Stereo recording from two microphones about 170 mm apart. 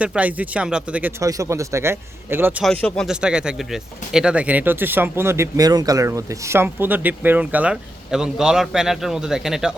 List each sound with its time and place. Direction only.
0.0 s speech: 10° right (ahead or behind)
1.2 s speech: 20° right (ahead or behind)
2.6 s speech: 5° left (ahead or behind)